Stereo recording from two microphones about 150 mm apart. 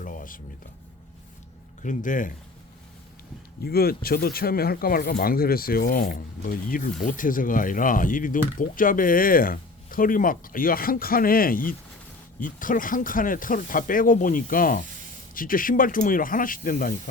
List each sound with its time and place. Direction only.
0.0 s a sound: 65° left (ahead or behind)
1.8 s speech: 60° left (ahead or behind)
3.6 s speech: 90° left; by 16.9 s 65° left (ahead or behind)